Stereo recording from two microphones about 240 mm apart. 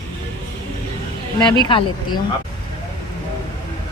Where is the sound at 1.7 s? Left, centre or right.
Left.